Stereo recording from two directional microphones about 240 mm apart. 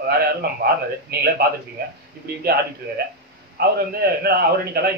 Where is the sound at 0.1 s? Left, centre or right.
Right.